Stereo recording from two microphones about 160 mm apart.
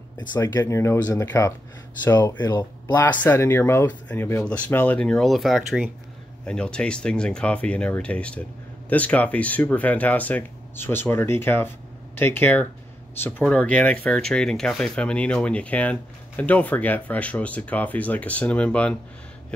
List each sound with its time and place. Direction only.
0.3 s speech: 25° left (ahead or behind)
3.0 s speech: 10° left (ahead or behind)